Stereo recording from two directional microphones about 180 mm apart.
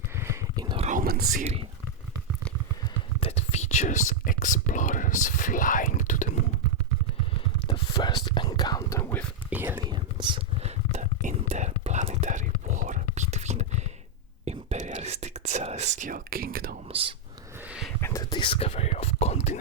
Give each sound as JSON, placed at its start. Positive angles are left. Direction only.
{"t": 0.2, "sound": "a sound", "side_deg": -20}
{"t": 0.9, "sound": "whispering", "side_deg": -50}
{"t": 1.4, "sound": "speech", "side_deg": -35}
{"t": 3.2, "sound": "speech", "side_deg": 35}
{"t": 7.7, "sound": "whispering", "side_deg": 25}
{"t": 9.5, "sound": "speech", "side_deg": -10}
{"t": 9.9, "sound": "whispering", "side_deg": -25}
{"t": 16.9, "sound": "speech", "side_deg": -30}
{"t": 17.7, "sound": "a sound", "side_deg": -5}
{"t": 18.0, "sound": "whispering", "side_deg": 20}